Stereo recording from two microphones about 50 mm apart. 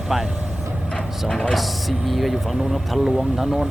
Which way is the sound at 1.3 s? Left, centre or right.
Centre.